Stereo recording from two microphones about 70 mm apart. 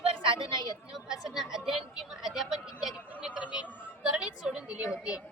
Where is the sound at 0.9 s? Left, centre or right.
Centre.